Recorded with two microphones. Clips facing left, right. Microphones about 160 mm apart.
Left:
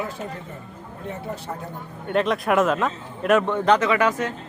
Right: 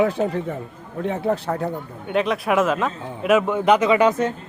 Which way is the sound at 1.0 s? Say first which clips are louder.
Right 9 dB; 80° right.